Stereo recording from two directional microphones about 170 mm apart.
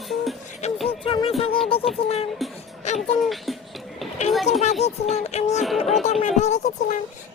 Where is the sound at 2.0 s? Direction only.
35° left (ahead or behind).